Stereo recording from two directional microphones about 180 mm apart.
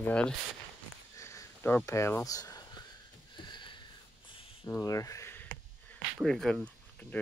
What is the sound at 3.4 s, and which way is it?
Sniff, 25° left (ahead or behind).